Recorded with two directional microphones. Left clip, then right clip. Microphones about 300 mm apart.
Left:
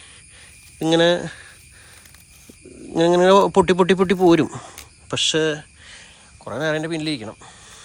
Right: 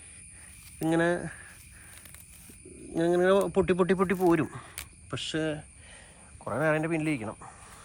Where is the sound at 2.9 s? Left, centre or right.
Centre.